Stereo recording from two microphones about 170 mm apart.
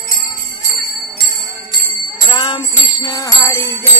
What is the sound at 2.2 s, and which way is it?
Jingle bell, 25° left (ahead or behind).